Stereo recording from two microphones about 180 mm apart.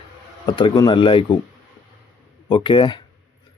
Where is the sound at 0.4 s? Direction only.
25° left (ahead or behind).